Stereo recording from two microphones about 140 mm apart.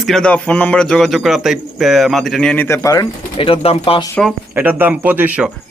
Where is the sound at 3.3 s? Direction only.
40° left (ahead or behind).